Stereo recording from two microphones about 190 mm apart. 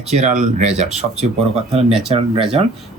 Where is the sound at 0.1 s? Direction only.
40° right (ahead or behind).